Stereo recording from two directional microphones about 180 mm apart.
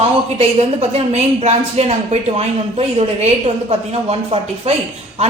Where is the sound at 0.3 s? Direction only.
35° right (ahead or behind).